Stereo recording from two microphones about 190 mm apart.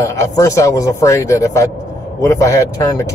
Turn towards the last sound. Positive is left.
turn(degrees=15)  # may be behind; listen again after turning